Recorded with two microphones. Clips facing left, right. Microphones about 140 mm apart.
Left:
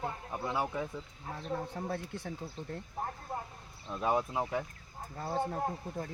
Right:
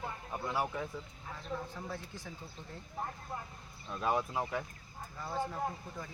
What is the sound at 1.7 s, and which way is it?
Speech, 60° left (ahead or behind).